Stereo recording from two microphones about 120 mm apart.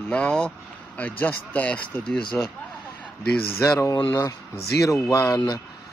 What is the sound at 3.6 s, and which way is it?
Speech, 25° left (ahead or behind).